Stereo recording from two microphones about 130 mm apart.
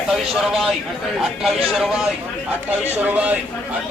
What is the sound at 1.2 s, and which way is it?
Speech, centre (ahead or behind).